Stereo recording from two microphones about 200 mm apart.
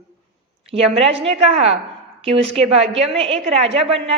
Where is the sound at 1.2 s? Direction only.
30° right (ahead or behind).